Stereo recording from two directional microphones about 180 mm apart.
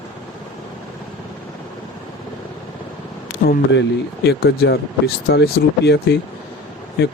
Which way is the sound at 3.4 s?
55° left (ahead or behind).